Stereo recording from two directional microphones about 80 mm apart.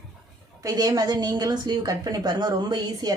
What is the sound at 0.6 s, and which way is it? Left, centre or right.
A woman's voice, right.